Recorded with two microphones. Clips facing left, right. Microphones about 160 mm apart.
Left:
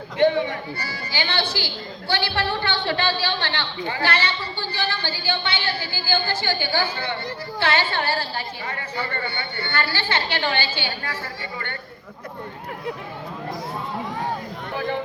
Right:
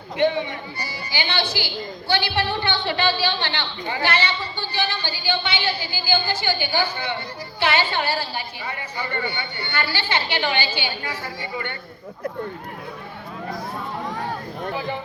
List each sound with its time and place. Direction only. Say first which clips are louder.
0.8 s a woman's voice: even; 15° right (ahead or behind)